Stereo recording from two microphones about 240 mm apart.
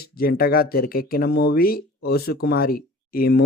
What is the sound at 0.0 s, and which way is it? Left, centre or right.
Speech, left.